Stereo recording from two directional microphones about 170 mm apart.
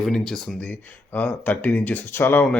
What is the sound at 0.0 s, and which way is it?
Speech, 5° left (ahead or behind).